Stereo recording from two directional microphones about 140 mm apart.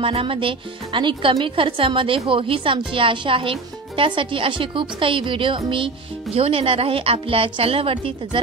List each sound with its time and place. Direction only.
0.0 s speech: 40° right (ahead or behind)